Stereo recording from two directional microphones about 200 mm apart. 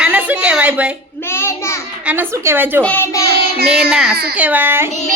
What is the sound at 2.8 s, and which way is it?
Speech, 10° left (ahead or behind).